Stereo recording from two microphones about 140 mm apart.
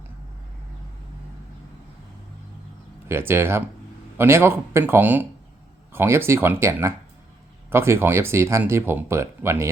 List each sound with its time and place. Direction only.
3.1 s speech: 15° right (ahead or behind)